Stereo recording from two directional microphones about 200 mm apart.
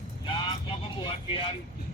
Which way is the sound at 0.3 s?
25° left (ahead or behind).